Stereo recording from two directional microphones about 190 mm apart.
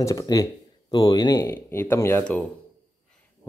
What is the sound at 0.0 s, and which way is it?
Speech, 20° left (ahead or behind).